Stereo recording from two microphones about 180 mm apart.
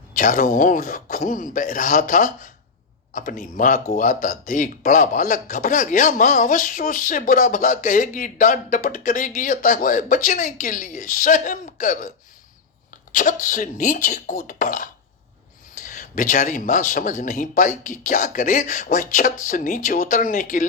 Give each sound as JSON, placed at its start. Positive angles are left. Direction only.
{"t": 0.1, "sound": "speech", "side_deg": 45}
{"t": 13.1, "sound": "speech", "side_deg": 45}